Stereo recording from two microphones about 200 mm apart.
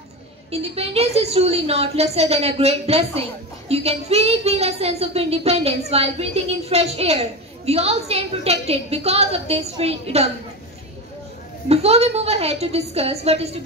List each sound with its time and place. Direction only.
0.5 s a woman's voice: 30° right (ahead or behind)
11.7 s a woman's voice: 30° right (ahead or behind)